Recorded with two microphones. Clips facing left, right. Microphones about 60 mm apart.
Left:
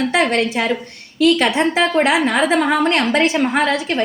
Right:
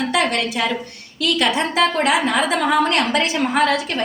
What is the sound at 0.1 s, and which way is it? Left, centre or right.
A woman's voice, left.